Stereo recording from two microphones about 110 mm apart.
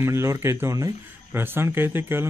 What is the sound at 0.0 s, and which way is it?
A man's voice, 25° right (ahead or behind).